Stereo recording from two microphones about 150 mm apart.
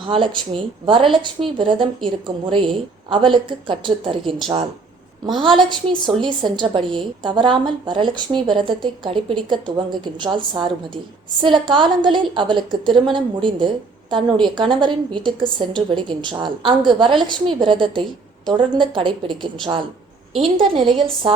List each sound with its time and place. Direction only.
0.0 s a woman's voice: 35° right (ahead or behind)
6.1 s a woman's voice: 30° right (ahead or behind)